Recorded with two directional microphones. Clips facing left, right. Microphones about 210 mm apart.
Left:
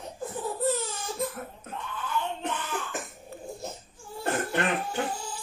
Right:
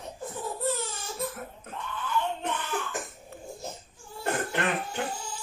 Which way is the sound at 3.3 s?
30° left (ahead or behind).